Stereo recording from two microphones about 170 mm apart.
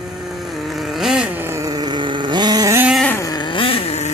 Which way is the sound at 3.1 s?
20° left (ahead or behind).